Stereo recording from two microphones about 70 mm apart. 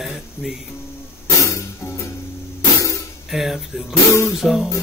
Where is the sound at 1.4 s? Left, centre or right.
Left.